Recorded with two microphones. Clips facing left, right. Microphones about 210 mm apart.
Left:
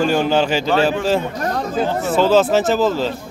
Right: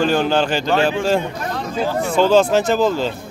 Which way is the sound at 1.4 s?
45° left (ahead or behind).